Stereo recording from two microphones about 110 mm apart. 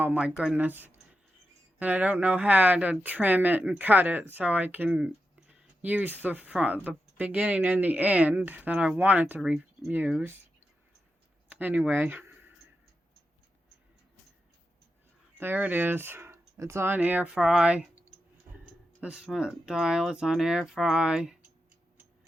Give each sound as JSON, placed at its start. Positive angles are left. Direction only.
{"t": 0.0, "sound": "speech", "side_deg": -10}
{"t": 11.4, "sound": "speech", "side_deg": -15}
{"t": 15.4, "sound": "speech", "side_deg": -15}
{"t": 19.0, "sound": "speech", "side_deg": -5}